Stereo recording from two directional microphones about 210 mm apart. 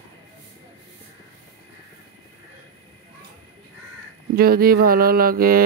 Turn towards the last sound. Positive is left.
turn(degrees=-45)  # may be behind; listen again after turning